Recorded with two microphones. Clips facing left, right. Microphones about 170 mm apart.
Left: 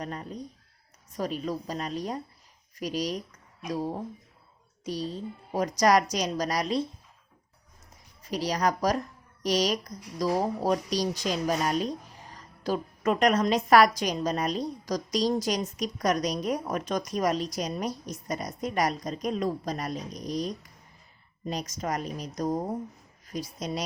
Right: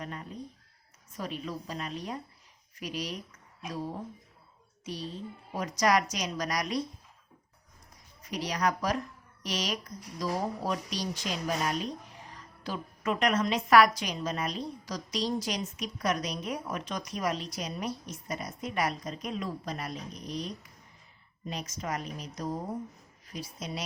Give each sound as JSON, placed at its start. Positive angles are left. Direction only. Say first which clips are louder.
{"t": 0.0, "sound": "a woman's voice", "louder": "left 4 dB", "side_deg": 40}
{"t": 8.2, "sound": "a woman's voice", "louder": "left 3 dB", "side_deg": 35}